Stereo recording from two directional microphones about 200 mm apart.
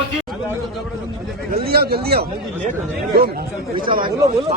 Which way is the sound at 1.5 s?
50° right (ahead or behind).